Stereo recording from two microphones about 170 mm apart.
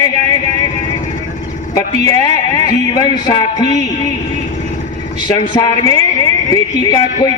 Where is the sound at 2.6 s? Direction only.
25° left (ahead or behind).